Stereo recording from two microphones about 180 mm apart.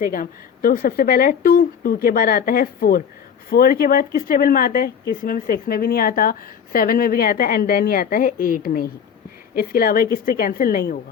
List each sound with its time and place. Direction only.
0.0 s a woman's voice: 50° left (ahead or behind)